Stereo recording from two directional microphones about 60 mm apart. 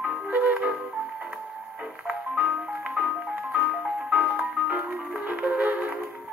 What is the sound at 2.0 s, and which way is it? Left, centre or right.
Music, centre.